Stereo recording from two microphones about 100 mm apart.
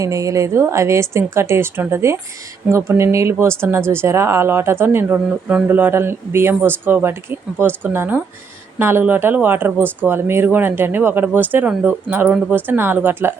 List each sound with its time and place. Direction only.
0.0 s speech: 35° right (ahead or behind)